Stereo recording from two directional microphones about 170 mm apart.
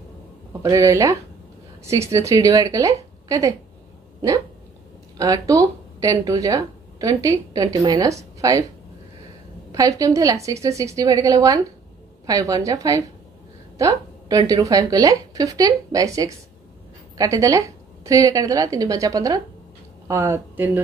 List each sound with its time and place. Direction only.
0.5 s speech: 15° right (ahead or behind)
5.1 s speech: 20° right (ahead or behind)
9.7 s speech: 20° right (ahead or behind)